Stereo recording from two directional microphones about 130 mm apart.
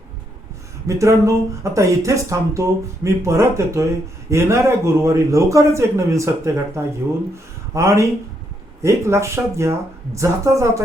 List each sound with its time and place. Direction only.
0.9 s speech: 25° right (ahead or behind)